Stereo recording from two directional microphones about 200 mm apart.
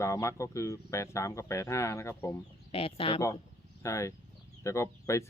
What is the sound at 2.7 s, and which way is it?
Speech, 30° left (ahead or behind).